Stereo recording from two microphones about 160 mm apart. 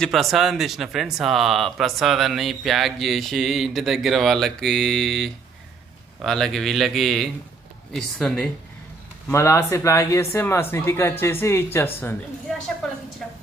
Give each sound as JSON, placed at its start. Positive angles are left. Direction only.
{"t": 0.0, "sound": "speech", "side_deg": 0}
{"t": 9.3, "sound": "speech", "side_deg": 15}
{"t": 12.5, "sound": "a sound", "side_deg": 0}